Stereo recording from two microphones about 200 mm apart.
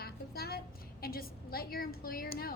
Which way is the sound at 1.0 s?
50° left (ahead or behind).